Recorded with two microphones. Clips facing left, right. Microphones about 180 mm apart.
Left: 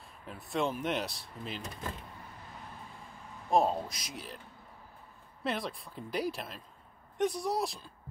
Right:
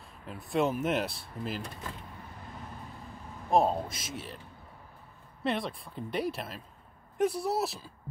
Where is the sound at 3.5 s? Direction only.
Centre (ahead or behind).